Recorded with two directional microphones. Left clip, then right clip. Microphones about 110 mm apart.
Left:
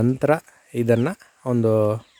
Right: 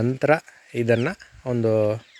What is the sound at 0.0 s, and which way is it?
Speech, 35° left (ahead or behind).